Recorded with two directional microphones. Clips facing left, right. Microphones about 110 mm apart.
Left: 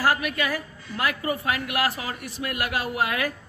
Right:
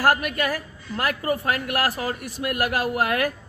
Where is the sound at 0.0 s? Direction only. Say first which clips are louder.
Right 3 dB; 50° right (ahead or behind).